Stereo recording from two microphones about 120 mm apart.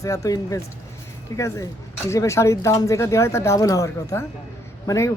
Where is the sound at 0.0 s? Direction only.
30° left (ahead or behind).